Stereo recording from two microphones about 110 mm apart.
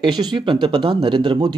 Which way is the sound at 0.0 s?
40° right (ahead or behind).